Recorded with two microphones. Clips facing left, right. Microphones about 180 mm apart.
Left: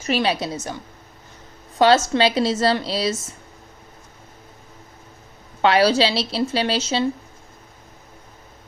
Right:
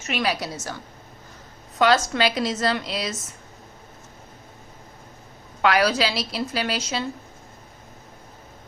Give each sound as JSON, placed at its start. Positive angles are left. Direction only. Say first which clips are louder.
{"t": 0.0, "sound": "a woman's voice", "louder": "left 4 dB", "side_deg": 30}
{"t": 1.8, "sound": "a woman's voice", "louder": "left 4 dB", "side_deg": 30}
{"t": 5.6, "sound": "a woman's voice", "louder": "left 4 dB", "side_deg": 30}